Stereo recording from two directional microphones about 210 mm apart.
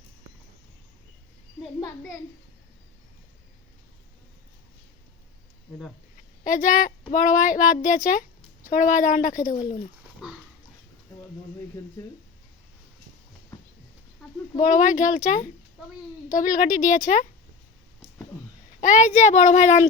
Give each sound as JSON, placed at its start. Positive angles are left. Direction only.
{"t": 6.4, "sound": "a woman's voice", "side_deg": 40}
{"t": 10.2, "sound": "dog", "side_deg": 0}
{"t": 11.8, "sound": "speech", "side_deg": 15}
{"t": 14.6, "sound": "a woman's voice", "side_deg": 40}
{"t": 18.8, "sound": "a woman's voice", "side_deg": 35}